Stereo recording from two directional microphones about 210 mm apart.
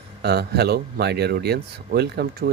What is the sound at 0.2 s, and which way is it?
Speech, 50° right (ahead or behind).